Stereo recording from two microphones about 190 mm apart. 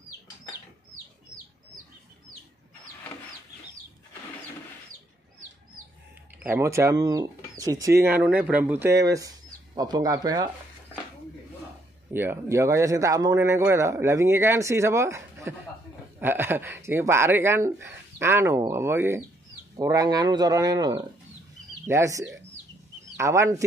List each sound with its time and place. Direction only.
6.4 s speech: 15° right (ahead or behind)
12.1 s speech: 10° right (ahead or behind)